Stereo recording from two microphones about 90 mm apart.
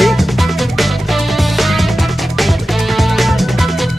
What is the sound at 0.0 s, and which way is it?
Music, centre (ahead or behind).